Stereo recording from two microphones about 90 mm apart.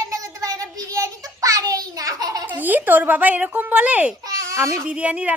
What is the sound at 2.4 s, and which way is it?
Speech, 20° right (ahead or behind).